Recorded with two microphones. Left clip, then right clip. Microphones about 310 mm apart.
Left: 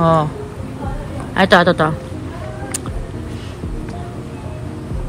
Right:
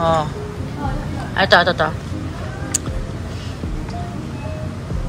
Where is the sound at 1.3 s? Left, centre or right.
Left.